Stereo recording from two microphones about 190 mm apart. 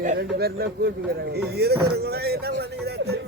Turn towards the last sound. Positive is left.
turn(degrees=-60)  # may be behind; listen again after turning